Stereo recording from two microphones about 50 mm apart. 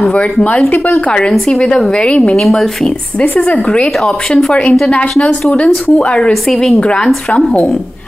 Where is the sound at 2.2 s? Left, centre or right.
Centre.